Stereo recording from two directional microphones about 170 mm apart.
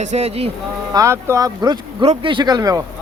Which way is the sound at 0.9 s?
15° right (ahead or behind).